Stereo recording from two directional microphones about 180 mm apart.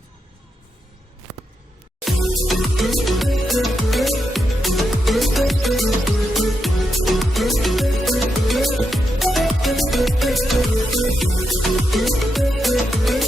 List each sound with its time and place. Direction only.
2.0 s music: centre (ahead or behind)